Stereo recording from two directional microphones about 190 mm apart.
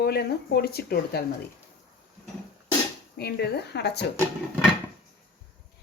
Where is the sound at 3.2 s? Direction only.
60° left (ahead or behind).